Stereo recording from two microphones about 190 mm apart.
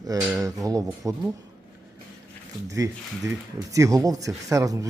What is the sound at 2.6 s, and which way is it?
Speech, 15° right (ahead or behind).